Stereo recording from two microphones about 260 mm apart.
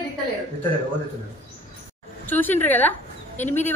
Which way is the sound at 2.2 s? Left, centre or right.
Centre.